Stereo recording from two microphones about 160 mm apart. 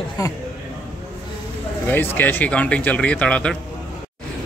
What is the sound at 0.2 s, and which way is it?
Speech, 20° left (ahead or behind).